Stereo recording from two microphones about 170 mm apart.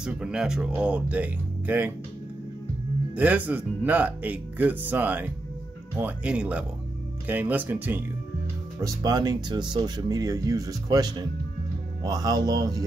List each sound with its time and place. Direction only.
0.0 s speech: 5° right (ahead or behind)
3.2 s speech: 10° right (ahead or behind)
8.8 s speech: 20° right (ahead or behind)